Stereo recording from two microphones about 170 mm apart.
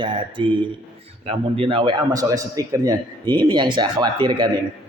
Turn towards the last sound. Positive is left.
turn(degrees=-25)  # may be behind; listen again after turning